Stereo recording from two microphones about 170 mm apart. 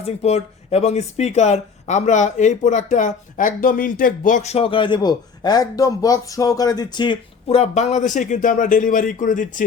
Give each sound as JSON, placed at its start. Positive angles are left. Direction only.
{"t": 0.0, "sound": "speech", "side_deg": 40}